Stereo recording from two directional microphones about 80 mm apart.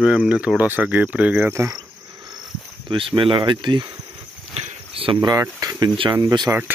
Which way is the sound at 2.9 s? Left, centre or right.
Right.